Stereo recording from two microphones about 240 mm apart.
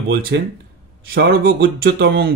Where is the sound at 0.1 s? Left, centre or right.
Right.